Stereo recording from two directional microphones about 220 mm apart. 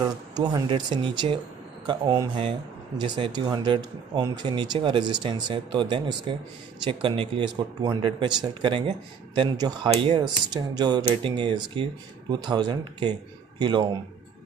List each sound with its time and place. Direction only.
0.0 s speech: 20° right (ahead or behind)